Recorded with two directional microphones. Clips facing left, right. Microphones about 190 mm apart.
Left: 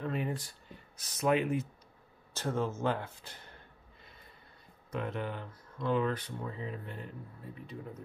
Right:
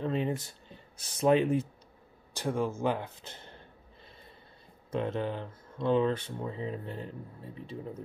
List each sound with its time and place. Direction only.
0.0 s a sound: 25° right (ahead or behind)
2.3 s speech: 15° right (ahead or behind)
4.9 s speech: 25° right (ahead or behind)